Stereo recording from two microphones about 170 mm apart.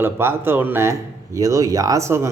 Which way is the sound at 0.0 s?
15° right (ahead or behind).